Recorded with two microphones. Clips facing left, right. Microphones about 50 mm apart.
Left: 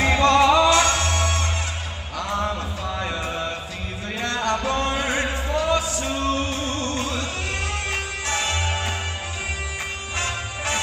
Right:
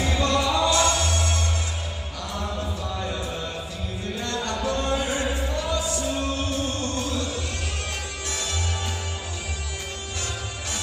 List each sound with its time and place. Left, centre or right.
0.0 s music: left
2.1 s a sound: left
6.0 s music: left
10.1 s music: left